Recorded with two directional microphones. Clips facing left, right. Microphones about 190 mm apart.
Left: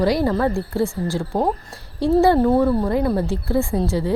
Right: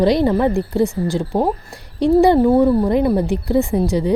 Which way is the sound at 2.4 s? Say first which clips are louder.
Right 4 dB; 5° right (ahead or behind).